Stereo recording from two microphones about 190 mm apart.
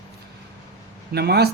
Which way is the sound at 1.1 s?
60° right (ahead or behind).